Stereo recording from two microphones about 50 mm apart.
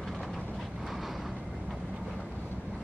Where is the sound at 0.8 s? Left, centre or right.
Centre.